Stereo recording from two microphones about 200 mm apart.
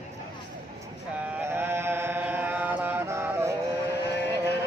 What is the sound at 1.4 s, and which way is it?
Chant, 10° right (ahead or behind).